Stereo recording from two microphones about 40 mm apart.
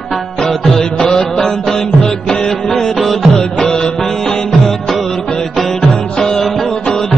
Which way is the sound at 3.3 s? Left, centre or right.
Centre.